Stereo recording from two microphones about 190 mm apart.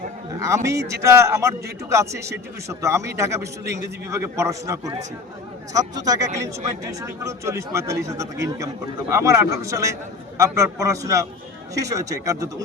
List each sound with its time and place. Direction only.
0.3 s speech: 15° right (ahead or behind)